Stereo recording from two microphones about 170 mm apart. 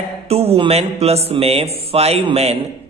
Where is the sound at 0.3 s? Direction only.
35° right (ahead or behind).